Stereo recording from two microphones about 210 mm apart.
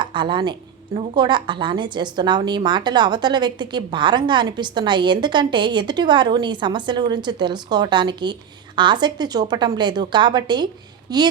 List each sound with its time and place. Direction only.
0.0 s a woman's voice: 20° right (ahead or behind)